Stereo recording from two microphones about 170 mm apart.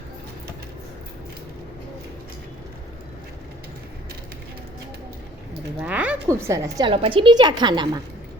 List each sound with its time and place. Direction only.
5.8 s a sound: 5° right (ahead or behind)
6.2 s a woman's voice: 15° right (ahead or behind)
6.9 s a woman's voice: 30° right (ahead or behind)